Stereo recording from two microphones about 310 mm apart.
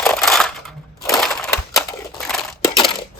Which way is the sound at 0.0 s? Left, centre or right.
Centre.